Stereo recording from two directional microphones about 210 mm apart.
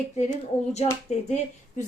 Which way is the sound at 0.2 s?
35° left (ahead or behind).